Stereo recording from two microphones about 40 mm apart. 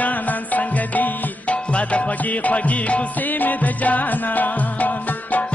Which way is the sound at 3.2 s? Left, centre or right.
Left.